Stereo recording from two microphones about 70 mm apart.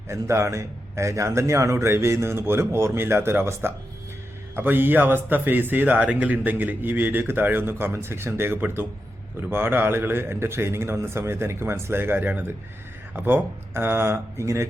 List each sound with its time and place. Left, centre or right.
0.1 s a man's voice: right